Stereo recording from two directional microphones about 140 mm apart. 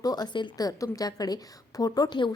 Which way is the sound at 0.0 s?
30° left (ahead or behind).